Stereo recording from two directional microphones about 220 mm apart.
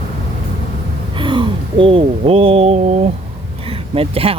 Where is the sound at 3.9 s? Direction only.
25° right (ahead or behind).